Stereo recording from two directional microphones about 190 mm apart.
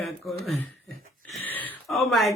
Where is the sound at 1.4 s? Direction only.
10° left (ahead or behind).